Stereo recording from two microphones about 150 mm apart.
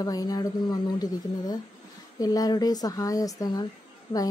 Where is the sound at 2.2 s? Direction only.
25° left (ahead or behind).